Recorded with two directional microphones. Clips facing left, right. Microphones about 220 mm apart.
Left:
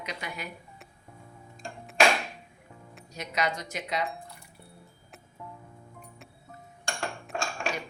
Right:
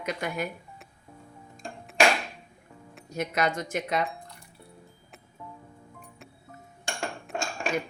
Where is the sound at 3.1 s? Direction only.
50° right (ahead or behind).